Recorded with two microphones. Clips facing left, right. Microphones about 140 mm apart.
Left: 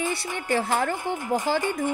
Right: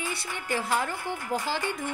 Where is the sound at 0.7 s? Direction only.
50° left (ahead or behind).